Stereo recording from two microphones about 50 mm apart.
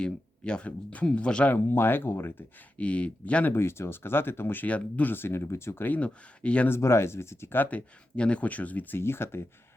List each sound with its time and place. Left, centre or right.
0.0 s speech: centre
1.5 s speech: left
2.7 s speech: left
3.5 s speech: left
4.6 s speech: left
5.1 s speech: left
6.0 s speech: left
6.7 s speech: left
7.7 s speech: left
9.0 s speech: left